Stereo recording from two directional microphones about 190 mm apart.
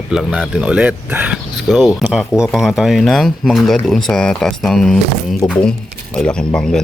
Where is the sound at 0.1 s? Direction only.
Centre (ahead or behind).